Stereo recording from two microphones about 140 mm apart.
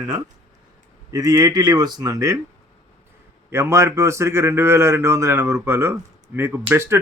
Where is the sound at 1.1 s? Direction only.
25° right (ahead or behind).